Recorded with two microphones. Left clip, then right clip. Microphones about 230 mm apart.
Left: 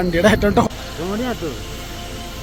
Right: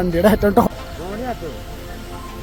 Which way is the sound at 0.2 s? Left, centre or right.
Centre.